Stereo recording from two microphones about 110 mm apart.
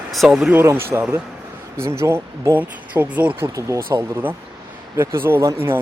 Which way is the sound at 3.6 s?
30° right (ahead or behind).